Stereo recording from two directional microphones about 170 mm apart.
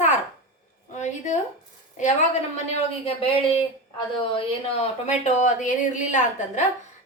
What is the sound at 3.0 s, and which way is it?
Speech, 35° left (ahead or behind).